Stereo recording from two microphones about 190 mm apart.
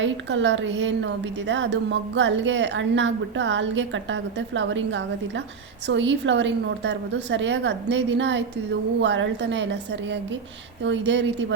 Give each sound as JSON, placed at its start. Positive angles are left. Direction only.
{"t": 0.0, "sound": "a woman's voice", "side_deg": -75}